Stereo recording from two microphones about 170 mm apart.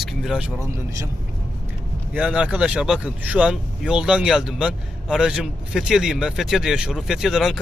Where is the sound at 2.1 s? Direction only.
5° right (ahead or behind).